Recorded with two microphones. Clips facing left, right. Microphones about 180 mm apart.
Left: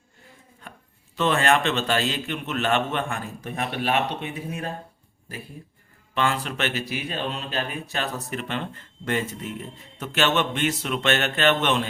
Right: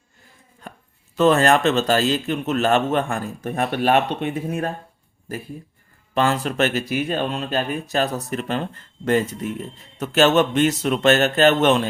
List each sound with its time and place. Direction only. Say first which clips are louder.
1.1 s a man's voice: right 6 dB; 40° right (ahead or behind)
10.0 s a man's voice: right 7 dB; 40° right (ahead or behind)